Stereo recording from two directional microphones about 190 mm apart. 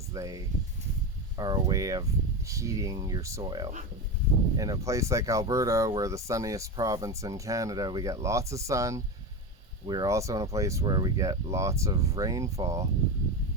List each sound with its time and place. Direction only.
0.1 s speech: 20° right (ahead or behind)
1.4 s speech: 20° right (ahead or behind)